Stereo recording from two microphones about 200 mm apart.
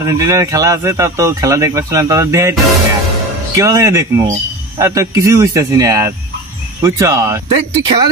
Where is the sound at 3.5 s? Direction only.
15° right (ahead or behind).